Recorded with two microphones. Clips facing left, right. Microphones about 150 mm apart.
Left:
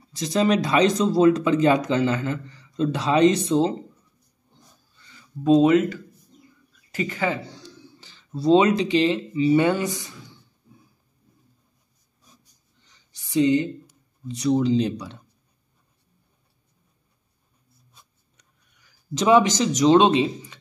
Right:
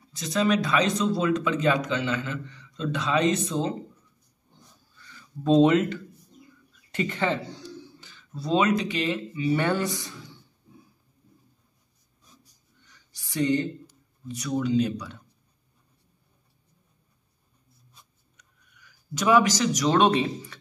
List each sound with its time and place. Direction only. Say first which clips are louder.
0.1 s speech: left 3 dB; 35° left (ahead or behind)
5.1 s speech: left 3 dB; 10° left (ahead or behind)
8.0 s speech: left 14 dB; 30° left (ahead or behind)
12.8 s a sound: right 1 dB; 25° left (ahead or behind)
14.2 s speech: left 7 dB; 25° left (ahead or behind)
18.4 s speech: right 4 dB; 30° left (ahead or behind)